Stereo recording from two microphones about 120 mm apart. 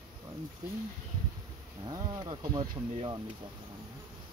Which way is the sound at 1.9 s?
35° right (ahead or behind).